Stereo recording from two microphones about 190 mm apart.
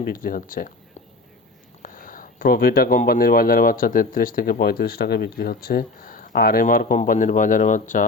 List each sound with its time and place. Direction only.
0.0 s speech: 50° left (ahead or behind)
1.8 s speech: 45° left (ahead or behind)